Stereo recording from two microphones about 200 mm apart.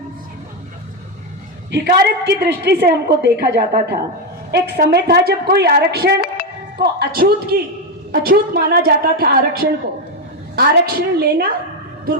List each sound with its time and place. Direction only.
1.7 s a woman's voice: 60° right (ahead or behind)